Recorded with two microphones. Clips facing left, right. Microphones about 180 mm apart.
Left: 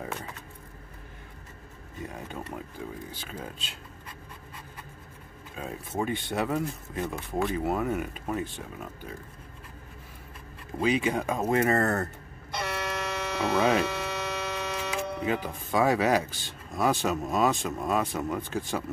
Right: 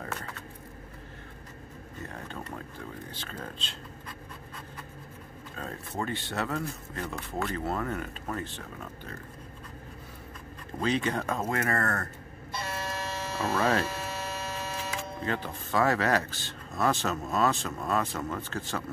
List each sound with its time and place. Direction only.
0.0 s a sound: 10° left (ahead or behind)
2.0 s speech: 10° left (ahead or behind)
5.6 s speech: 10° left (ahead or behind)
10.8 s speech: 10° left (ahead or behind)
12.4 s music: 75° left (ahead or behind)
13.8 s hum: 75° left (ahead or behind)
15.2 s speech: 10° left (ahead or behind)